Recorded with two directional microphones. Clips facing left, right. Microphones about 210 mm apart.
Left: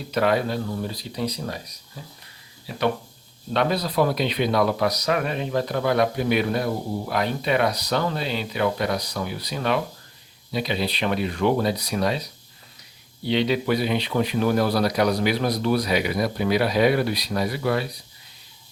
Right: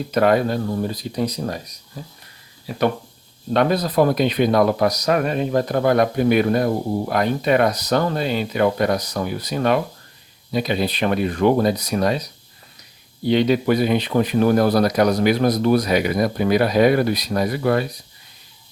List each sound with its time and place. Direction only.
0.1 s speech: 45° right (ahead or behind)
3.5 s speech: 50° right (ahead or behind)